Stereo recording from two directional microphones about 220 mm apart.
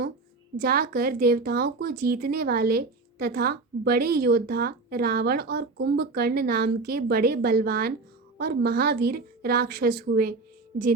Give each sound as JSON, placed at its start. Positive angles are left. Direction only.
{"t": 0.5, "sound": "speech", "side_deg": -45}